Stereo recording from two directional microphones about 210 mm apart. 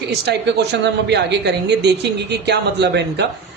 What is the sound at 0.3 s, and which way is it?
A woman's voice, 55° right (ahead or behind).